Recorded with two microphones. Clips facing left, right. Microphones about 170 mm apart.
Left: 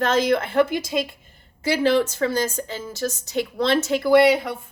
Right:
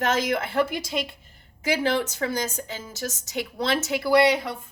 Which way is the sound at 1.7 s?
15° right (ahead or behind).